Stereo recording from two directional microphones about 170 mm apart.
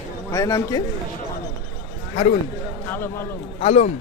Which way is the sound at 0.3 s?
20° left (ahead or behind).